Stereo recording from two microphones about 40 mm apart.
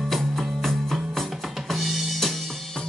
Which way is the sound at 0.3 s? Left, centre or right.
Centre.